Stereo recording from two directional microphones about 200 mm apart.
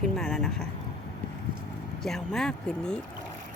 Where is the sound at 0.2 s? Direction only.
Centre (ahead or behind).